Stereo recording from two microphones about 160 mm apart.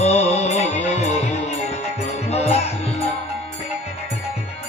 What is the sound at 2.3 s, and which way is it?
Music, 40° left (ahead or behind).